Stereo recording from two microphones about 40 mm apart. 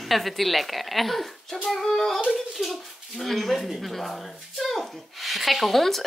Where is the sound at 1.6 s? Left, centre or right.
Centre.